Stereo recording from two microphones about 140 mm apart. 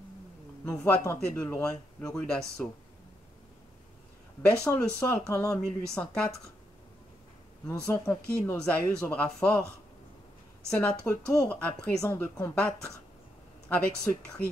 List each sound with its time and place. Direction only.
0.7 s speech: 10° left (ahead or behind)
4.5 s speech: 15° left (ahead or behind)
7.6 s speech: 15° left (ahead or behind)
10.7 s speech: 20° left (ahead or behind)
12.1 s speech: 15° left (ahead or behind)